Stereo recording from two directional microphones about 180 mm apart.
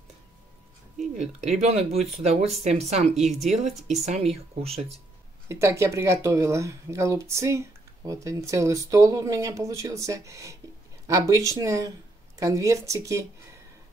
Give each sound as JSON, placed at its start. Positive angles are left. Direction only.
{"t": 1.4, "sound": "speech", "side_deg": -35}
{"t": 5.5, "sound": "speech", "side_deg": -15}